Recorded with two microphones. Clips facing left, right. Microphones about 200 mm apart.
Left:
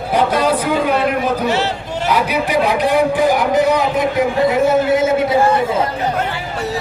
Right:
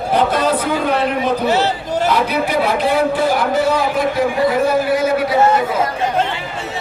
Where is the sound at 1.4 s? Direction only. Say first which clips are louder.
Right 2 dB; 40° right (ahead or behind).